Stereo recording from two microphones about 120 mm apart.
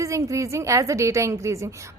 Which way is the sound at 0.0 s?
25° right (ahead or behind).